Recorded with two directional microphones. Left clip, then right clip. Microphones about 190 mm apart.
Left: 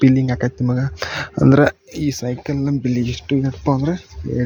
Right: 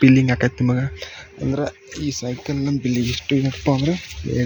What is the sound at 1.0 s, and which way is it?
Speech, 45° left (ahead or behind).